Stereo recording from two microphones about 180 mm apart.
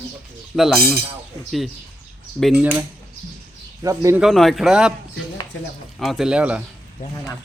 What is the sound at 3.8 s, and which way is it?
Speech, 15° right (ahead or behind).